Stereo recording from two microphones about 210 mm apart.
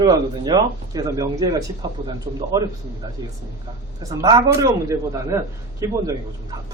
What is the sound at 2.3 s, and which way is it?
Speech, 30° right (ahead or behind).